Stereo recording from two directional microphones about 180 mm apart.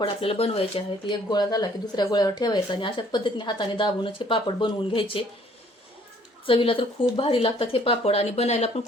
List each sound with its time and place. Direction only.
0.0 s speech: 30° left (ahead or behind)
6.4 s speech: 30° left (ahead or behind)